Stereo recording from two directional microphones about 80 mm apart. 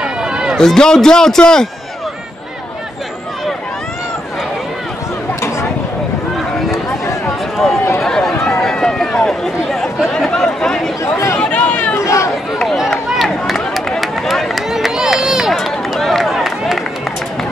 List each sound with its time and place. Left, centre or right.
0.0 s run: centre
0.6 s a man's voice: centre
8.0 s run: centre
10.1 s a sound: centre
11.1 s chatter: left
11.3 s chatter: centre
12.0 s chatter: left
12.5 s a sound: centre